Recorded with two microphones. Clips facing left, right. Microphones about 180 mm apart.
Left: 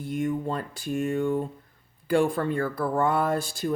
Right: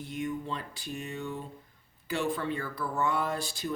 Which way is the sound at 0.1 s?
45° left (ahead or behind).